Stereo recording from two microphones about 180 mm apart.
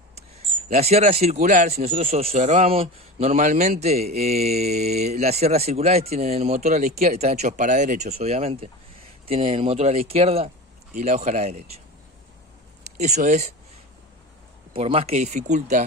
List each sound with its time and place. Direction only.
0.7 s speech: 35° right (ahead or behind)
13.0 s speech: 40° right (ahead or behind)
14.7 s speech: 30° right (ahead or behind)